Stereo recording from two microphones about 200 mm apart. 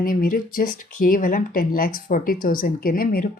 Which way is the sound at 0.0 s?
45° left (ahead or behind).